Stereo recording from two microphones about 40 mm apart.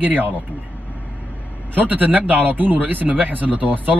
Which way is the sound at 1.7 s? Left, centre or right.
Right.